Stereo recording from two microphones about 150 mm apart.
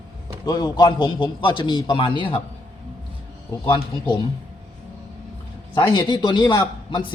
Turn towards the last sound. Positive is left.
turn(degrees=30)  # may be behind; listen again after turning